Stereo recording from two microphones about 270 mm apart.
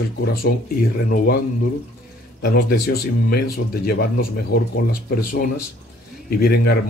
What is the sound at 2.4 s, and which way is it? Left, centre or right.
A man's voice, left.